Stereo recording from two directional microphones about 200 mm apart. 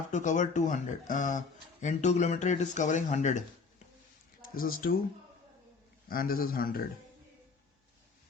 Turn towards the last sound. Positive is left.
turn(degrees=45)  # may be behind; listen again after turning